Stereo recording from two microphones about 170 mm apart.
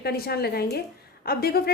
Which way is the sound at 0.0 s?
65° left (ahead or behind).